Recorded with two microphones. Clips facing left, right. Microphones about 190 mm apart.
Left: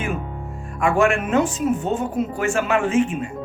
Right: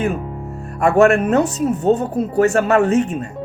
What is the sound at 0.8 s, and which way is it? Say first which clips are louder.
Speech: right 6 dB; 40° right (ahead or behind).